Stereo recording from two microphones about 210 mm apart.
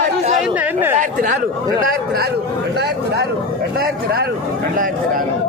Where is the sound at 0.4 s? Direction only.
5° right (ahead or behind).